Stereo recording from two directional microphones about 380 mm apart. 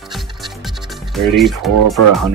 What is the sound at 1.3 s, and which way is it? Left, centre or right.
Speech, centre.